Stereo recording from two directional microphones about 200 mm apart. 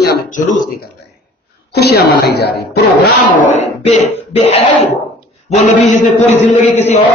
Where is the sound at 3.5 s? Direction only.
30° left (ahead or behind).